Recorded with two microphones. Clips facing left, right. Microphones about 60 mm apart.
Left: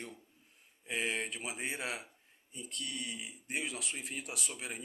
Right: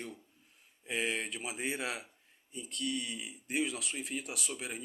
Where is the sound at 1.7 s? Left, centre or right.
Centre.